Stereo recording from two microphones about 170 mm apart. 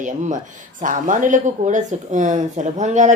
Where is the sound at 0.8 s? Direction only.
50° right (ahead or behind).